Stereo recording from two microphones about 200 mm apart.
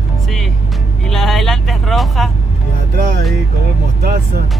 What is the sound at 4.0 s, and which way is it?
Speech, 50° right (ahead or behind).